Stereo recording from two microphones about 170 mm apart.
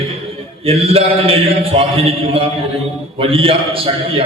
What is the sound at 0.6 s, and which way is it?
A man's voice, 35° right (ahead or behind).